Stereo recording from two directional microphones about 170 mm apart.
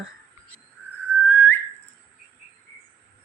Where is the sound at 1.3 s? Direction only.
10° left (ahead or behind).